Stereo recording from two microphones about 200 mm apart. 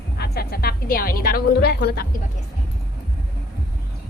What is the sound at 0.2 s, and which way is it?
A woman's voice, 50° left (ahead or behind).